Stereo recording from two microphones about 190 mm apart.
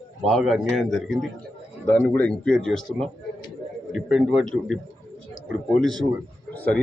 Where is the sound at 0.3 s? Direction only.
Centre (ahead or behind).